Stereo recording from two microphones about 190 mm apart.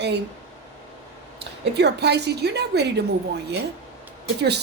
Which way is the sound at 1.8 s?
60° right (ahead or behind).